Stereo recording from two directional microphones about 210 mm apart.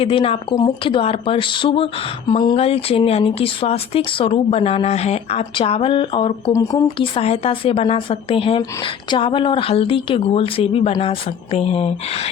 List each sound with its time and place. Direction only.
0.0 s speech: 25° left (ahead or behind)